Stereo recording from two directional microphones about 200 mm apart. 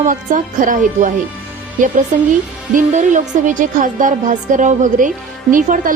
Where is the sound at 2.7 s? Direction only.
35° right (ahead or behind).